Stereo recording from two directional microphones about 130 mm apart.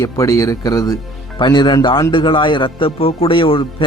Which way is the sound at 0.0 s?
25° left (ahead or behind).